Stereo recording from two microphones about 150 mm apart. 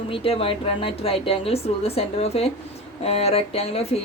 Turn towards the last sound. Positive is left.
turn(degrees=40)  # may be behind; listen again after turning